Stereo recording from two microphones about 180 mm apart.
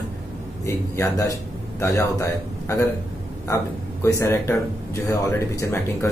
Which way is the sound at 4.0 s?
15° left (ahead or behind).